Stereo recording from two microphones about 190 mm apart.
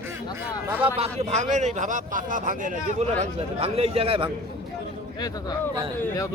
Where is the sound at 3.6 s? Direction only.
30° right (ahead or behind).